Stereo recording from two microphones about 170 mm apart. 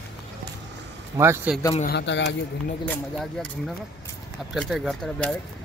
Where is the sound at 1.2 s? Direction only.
15° right (ahead or behind).